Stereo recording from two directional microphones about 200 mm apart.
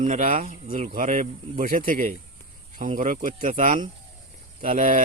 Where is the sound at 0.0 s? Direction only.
40° right (ahead or behind).